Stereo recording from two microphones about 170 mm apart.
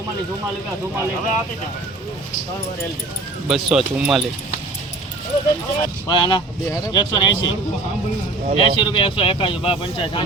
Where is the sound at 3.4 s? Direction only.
5° right (ahead or behind).